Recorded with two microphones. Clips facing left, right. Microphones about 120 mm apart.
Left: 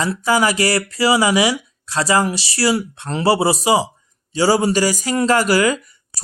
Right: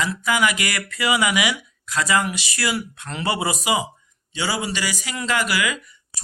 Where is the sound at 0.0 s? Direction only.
35° left (ahead or behind).